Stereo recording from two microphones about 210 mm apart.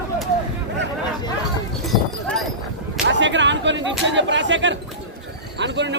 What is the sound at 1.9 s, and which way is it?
Clip-clop, centre (ahead or behind).